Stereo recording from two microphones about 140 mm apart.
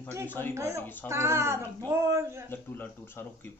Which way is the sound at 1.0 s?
20° right (ahead or behind).